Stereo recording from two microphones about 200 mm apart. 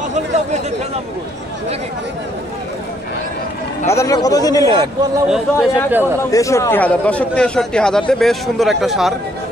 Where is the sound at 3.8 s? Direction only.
15° left (ahead or behind).